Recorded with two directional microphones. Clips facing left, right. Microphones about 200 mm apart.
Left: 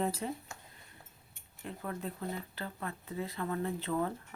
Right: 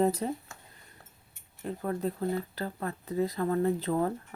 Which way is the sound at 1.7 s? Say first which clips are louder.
Right 8 dB; 40° right (ahead or behind).